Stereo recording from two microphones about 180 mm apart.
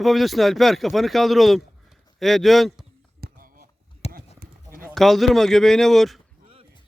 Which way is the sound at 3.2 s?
55° right (ahead or behind).